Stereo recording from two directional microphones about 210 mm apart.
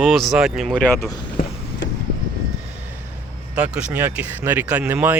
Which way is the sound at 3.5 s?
5° right (ahead or behind).